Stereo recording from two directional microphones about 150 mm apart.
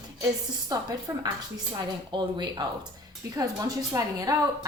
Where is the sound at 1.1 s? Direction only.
20° right (ahead or behind).